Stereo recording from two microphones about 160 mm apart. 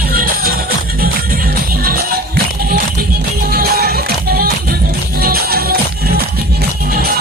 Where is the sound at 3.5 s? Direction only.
70° right (ahead or behind).